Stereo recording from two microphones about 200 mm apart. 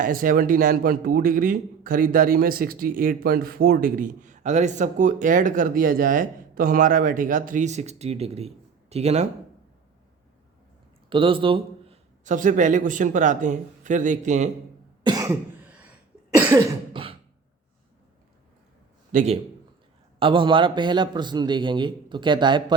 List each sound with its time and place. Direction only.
0.0 s speech: 45° right (ahead or behind)
11.1 s a man's voice: 25° right (ahead or behind)
15.0 s cough: 20° right (ahead or behind)
16.9 s beatboxing: 25° right (ahead or behind)
19.1 s a man's voice: 35° right (ahead or behind)